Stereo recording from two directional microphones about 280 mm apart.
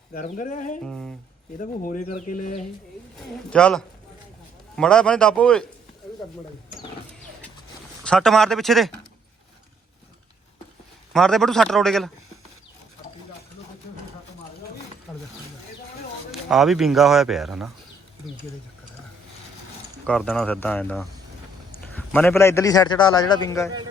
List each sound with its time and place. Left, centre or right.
0.1 s a sound: left
0.9 s speech: centre
1.5 s a sound: left
3.2 s speech: centre
8.0 s speech: centre
11.1 s speech: centre
15.1 s mechanisms: centre
16.3 s speech: centre
20.1 s a man's voice: centre